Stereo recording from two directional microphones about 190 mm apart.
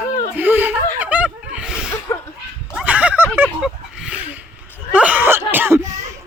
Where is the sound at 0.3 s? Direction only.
10° right (ahead or behind).